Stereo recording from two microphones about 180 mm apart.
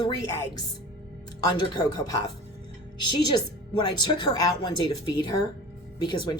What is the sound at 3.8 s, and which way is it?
A woman's voice, 25° left (ahead or behind).